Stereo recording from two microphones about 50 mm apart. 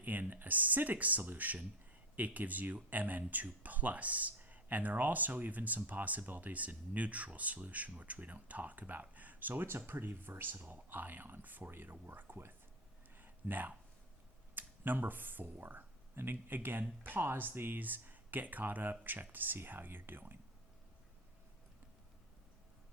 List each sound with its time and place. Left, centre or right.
0.0 s speech: right
13.1 s a sound: right
14.5 s speech: right